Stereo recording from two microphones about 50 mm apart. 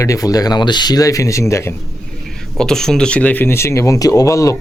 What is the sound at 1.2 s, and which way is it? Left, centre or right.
Speech, left.